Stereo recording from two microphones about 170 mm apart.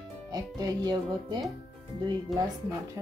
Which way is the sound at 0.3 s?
20° right (ahead or behind).